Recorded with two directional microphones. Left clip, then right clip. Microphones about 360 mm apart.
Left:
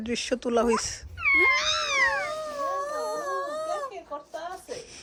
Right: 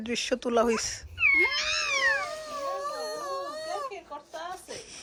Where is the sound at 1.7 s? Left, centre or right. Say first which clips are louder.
Left 2 dB; centre.